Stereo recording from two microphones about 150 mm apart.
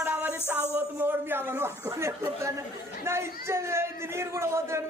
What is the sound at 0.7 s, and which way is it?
A man's voice, 15° right (ahead or behind).